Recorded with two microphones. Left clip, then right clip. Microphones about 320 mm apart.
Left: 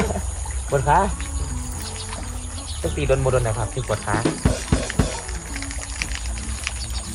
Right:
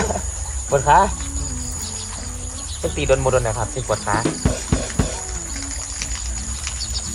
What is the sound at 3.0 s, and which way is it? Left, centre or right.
Speech, centre.